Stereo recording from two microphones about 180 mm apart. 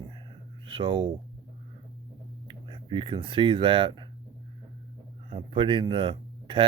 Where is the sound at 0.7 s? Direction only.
30° right (ahead or behind).